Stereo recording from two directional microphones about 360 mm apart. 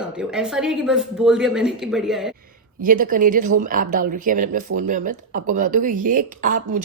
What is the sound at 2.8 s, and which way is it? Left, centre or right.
Speech, right.